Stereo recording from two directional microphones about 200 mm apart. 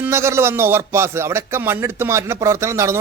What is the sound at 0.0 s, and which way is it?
A man's voice, 15° right (ahead or behind).